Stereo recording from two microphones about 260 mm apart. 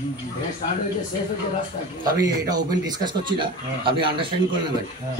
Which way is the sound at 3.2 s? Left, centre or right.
Centre.